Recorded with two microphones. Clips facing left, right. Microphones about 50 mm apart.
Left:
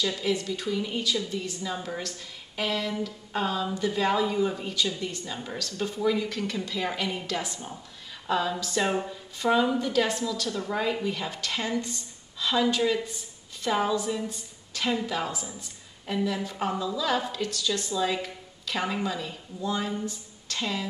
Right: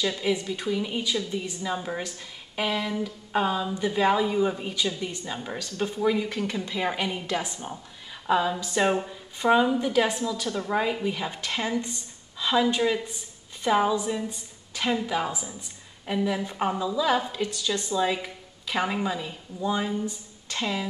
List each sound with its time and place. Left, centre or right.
0.2 s a woman's voice: centre